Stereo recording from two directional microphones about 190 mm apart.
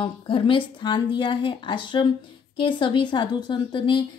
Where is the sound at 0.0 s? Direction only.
25° left (ahead or behind).